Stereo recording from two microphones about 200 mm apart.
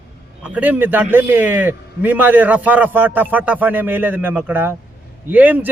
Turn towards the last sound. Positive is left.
turn(degrees=-10)  # may be behind; listen again after turning